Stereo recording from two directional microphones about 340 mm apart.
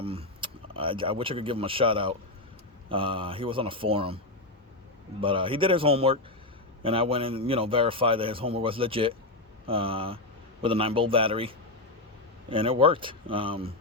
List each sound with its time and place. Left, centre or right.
0.0 s a man's voice: centre
5.2 s a man's voice: centre